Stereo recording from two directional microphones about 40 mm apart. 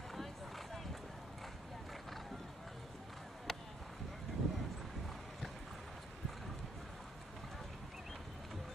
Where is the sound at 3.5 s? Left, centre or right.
Centre.